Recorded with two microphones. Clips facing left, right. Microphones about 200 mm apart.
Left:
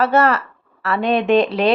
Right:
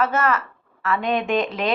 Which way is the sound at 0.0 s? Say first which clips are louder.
Left 6 dB; 65° left (ahead or behind).